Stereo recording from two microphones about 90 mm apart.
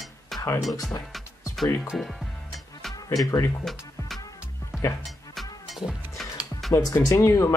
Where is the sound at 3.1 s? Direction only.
45° left (ahead or behind).